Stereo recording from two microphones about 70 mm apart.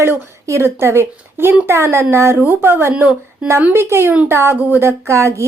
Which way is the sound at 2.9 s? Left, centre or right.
Centre.